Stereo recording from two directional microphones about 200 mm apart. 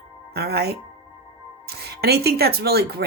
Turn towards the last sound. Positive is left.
turn(degrees=-50)  # may be behind; listen again after turning